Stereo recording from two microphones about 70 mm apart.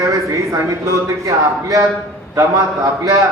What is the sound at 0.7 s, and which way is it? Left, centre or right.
A man's voice, right.